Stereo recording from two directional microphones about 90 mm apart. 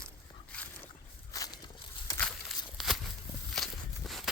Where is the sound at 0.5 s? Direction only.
15° left (ahead or behind).